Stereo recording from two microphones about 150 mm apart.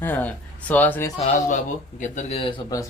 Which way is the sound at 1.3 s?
55° left (ahead or behind).